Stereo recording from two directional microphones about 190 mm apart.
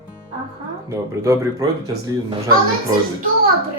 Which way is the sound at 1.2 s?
15° right (ahead or behind).